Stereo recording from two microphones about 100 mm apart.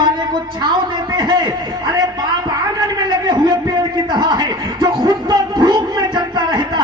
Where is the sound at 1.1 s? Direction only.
40° right (ahead or behind).